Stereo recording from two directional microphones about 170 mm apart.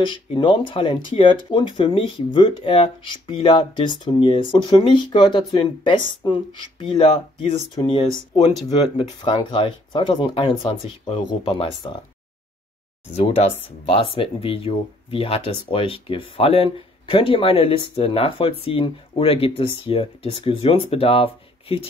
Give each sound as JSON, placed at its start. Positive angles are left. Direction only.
{"t": 0.0, "sound": "speech", "side_deg": 30}
{"t": 13.1, "sound": "speech", "side_deg": 40}